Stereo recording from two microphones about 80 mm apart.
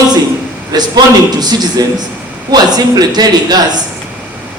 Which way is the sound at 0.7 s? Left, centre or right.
Right.